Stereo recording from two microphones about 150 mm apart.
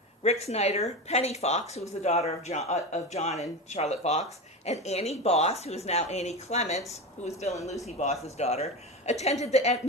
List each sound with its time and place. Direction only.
0.2 s speech: 45° left (ahead or behind)